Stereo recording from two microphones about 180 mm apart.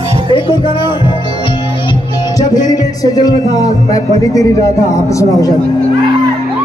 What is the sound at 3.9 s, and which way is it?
Speech, 20° left (ahead or behind).